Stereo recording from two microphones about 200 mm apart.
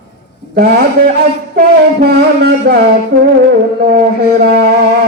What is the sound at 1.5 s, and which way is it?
Music, 50° right (ahead or behind).